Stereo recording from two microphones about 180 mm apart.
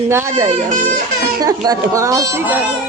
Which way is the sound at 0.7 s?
45° right (ahead or behind).